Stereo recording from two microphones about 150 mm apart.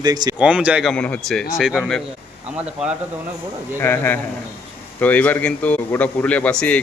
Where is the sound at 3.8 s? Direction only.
15° left (ahead or behind).